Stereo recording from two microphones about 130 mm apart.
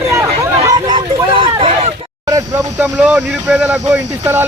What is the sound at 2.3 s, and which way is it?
Vehicle, 20° right (ahead or behind).